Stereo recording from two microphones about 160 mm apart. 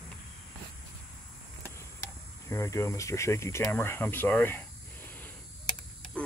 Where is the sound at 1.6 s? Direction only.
15° left (ahead or behind).